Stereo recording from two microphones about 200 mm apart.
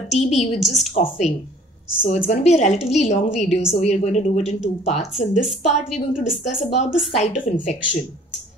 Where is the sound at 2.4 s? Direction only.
35° left (ahead or behind).